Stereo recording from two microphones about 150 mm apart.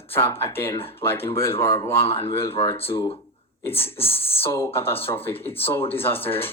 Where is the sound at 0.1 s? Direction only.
15° left (ahead or behind).